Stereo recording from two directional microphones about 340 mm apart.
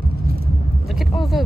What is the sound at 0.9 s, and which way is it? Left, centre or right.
Speech, centre.